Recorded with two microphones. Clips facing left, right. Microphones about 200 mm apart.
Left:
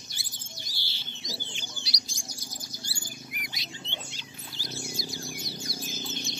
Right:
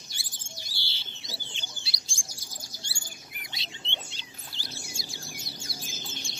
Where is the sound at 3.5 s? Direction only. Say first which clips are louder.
Left 2 dB; 25° right (ahead or behind).